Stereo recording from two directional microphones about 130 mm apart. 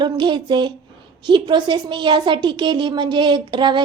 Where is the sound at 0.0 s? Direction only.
35° right (ahead or behind).